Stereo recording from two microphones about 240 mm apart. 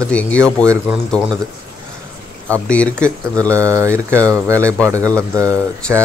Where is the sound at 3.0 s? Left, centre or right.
Centre.